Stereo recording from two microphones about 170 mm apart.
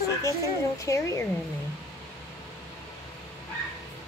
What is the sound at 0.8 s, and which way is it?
Speech, 20° left (ahead or behind).